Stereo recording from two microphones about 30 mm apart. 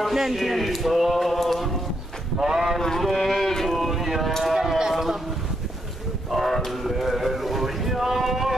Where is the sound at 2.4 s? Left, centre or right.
Centre.